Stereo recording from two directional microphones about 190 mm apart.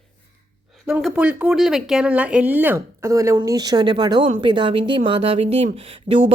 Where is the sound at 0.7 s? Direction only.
Centre (ahead or behind).